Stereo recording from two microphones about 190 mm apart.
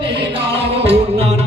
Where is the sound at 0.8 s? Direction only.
30° right (ahead or behind).